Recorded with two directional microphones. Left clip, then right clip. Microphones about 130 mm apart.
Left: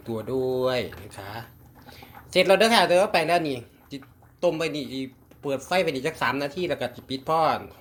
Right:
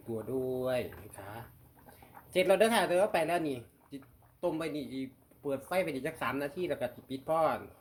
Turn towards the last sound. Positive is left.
turn(degrees=15)  # may be behind; listen again after turning